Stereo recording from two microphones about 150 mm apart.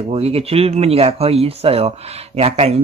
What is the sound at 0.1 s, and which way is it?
Speech, 40° right (ahead or behind).